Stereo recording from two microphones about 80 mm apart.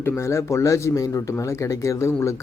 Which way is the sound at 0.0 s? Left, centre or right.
Left.